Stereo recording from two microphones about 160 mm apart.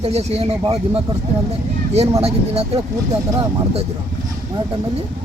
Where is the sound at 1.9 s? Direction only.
40° right (ahead or behind).